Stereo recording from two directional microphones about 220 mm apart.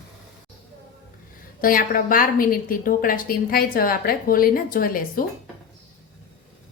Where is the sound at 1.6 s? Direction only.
40° left (ahead or behind).